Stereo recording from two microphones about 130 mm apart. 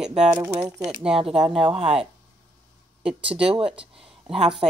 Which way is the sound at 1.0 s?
45° right (ahead or behind).